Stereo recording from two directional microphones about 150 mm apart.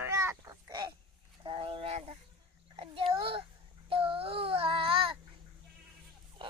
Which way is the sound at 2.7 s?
35° right (ahead or behind).